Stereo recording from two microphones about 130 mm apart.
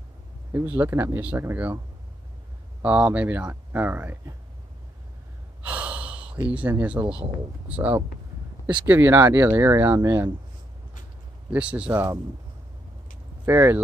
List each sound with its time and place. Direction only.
0.5 s speech: 15° right (ahead or behind)
2.8 s speech: 10° right (ahead or behind)
5.6 s gasp: 10° right (ahead or behind)
7.6 s speech: 10° right (ahead or behind)
11.5 s speech: 10° right (ahead or behind)
13.5 s speech: 20° right (ahead or behind)